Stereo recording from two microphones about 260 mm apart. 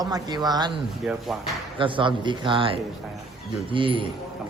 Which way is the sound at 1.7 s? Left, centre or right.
Centre.